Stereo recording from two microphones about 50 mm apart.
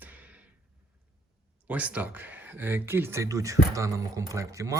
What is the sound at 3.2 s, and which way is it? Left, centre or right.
Speech, right.